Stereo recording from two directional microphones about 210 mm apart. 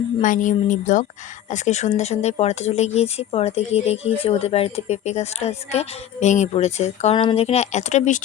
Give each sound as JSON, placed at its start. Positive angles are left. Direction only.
{"t": 0.2, "sound": "speech", "side_deg": 35}